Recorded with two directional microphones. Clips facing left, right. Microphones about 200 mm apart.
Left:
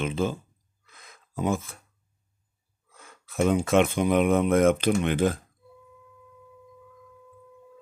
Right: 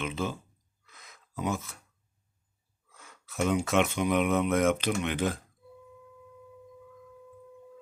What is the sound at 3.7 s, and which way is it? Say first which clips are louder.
Speech: left 6 dB; 50° left (ahead or behind).